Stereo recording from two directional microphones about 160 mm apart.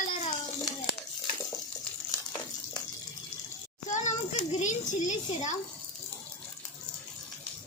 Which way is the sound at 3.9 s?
50° left (ahead or behind).